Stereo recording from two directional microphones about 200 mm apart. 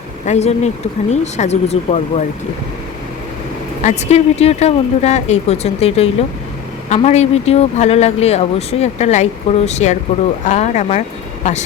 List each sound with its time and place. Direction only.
0.3 s speech: 35° left (ahead or behind)
3.8 s speech: 30° left (ahead or behind)